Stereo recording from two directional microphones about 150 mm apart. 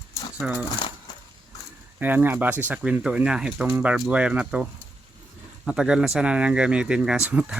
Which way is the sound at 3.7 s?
15° right (ahead or behind).